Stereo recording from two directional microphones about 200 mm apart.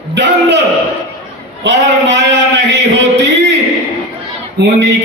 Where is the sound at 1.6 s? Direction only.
60° right (ahead or behind).